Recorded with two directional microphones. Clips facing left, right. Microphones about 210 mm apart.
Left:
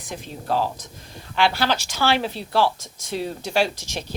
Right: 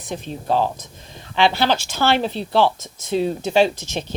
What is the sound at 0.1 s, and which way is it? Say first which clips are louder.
A woman's voice: right 4 dB; 20° right (ahead or behind).